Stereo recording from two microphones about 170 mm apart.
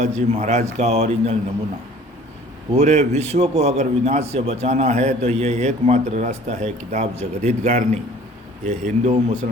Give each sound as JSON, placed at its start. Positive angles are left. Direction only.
{"t": 0.0, "sound": "a man's voice", "side_deg": -40}
{"t": 2.7, "sound": "a man's voice", "side_deg": -40}